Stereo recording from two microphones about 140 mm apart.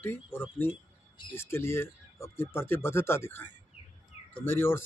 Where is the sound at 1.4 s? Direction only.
15° left (ahead or behind).